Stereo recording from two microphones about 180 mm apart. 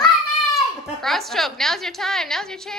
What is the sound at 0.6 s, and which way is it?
A woman's voice, centre (ahead or behind).